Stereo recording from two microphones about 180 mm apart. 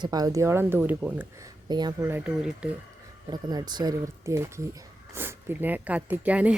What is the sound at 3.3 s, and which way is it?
Speech, 20° right (ahead or behind).